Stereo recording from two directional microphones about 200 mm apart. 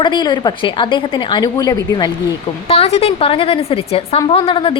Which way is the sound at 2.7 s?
30° left (ahead or behind).